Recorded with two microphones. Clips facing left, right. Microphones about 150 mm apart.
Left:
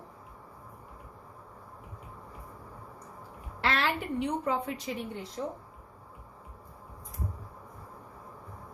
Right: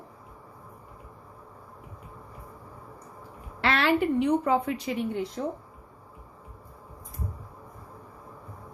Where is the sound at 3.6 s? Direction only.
70° right (ahead or behind).